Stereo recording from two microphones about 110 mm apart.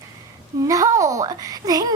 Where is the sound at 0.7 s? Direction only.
30° right (ahead or behind).